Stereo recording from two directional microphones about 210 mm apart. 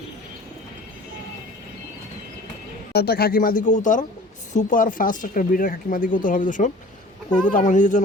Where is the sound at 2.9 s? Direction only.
50° left (ahead or behind).